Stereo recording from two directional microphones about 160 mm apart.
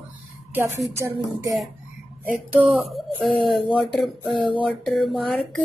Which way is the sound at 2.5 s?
Centre (ahead or behind).